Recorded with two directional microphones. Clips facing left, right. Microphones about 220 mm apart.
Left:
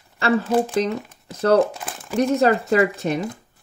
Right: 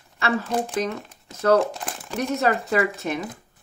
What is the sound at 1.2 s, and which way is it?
Speech, 30° left (ahead or behind).